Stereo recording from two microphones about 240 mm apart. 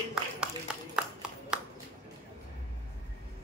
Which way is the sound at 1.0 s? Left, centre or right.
Centre.